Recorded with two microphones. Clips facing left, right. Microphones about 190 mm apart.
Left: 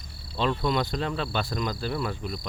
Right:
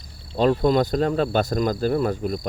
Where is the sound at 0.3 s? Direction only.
45° right (ahead or behind).